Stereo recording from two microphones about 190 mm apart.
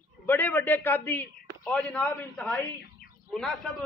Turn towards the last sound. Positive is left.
turn(degrees=0)  # may be behind; listen again after turning